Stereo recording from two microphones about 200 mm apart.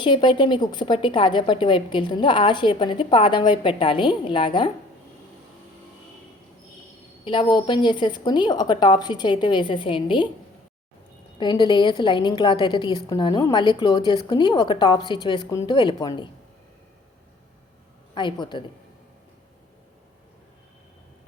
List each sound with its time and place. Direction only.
0.0 s a woman's voice: 25° left (ahead or behind)
7.3 s a woman's voice: 25° left (ahead or behind)
11.3 s a woman's voice: 20° left (ahead or behind)
18.1 s a woman's voice: 25° left (ahead or behind)